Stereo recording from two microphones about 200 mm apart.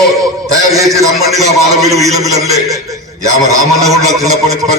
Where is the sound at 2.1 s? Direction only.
15° right (ahead or behind).